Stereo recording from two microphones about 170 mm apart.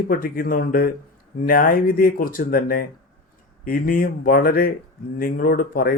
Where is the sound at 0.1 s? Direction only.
60° left (ahead or behind).